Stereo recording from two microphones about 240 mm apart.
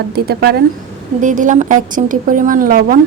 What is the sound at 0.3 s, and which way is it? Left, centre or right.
A woman's voice, right.